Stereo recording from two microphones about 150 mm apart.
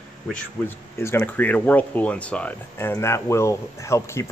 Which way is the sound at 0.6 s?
15° left (ahead or behind).